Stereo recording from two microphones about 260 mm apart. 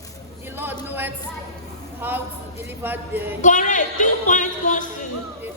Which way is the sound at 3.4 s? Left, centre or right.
Left.